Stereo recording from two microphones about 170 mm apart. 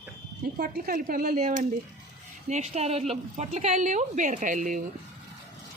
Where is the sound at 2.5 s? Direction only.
40° right (ahead or behind).